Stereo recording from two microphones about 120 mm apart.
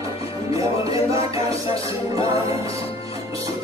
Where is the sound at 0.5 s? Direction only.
30° right (ahead or behind).